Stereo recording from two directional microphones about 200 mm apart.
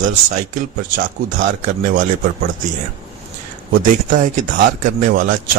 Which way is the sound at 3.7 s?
40° right (ahead or behind).